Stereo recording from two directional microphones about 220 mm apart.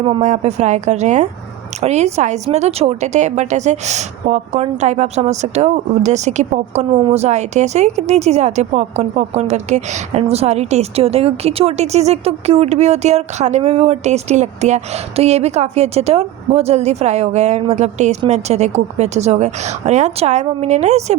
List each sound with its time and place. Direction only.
0.0 s speech: 30° right (ahead or behind)